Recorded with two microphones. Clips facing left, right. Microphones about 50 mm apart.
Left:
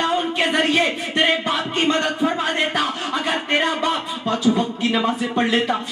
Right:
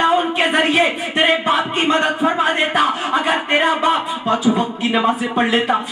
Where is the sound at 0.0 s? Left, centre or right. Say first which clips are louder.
Right 5 dB; right.